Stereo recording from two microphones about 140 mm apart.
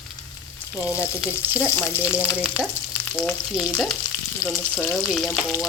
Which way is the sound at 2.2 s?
10° right (ahead or behind).